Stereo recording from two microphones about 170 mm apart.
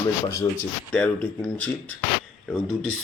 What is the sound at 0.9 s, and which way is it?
Speech, 5° left (ahead or behind).